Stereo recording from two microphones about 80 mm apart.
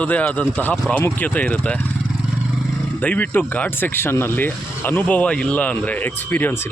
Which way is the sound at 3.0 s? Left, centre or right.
Centre.